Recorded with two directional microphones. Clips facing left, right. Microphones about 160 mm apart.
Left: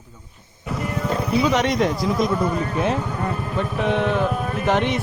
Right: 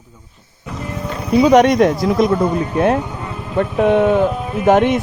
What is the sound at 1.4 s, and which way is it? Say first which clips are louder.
Speech: right 10 dB; 50° right (ahead or behind).